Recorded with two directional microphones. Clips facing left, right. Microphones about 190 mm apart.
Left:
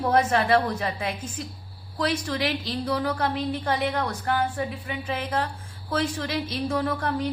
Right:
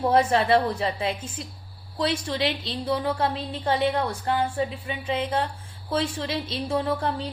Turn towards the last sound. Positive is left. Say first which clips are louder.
# even
turn(degrees=-25)  # may be behind; listen again after turning